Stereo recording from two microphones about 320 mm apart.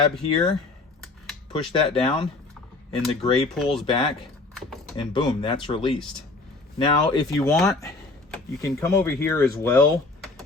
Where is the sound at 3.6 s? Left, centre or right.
Centre.